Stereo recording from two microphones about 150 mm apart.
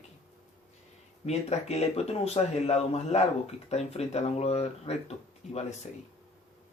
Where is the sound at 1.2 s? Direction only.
45° left (ahead or behind).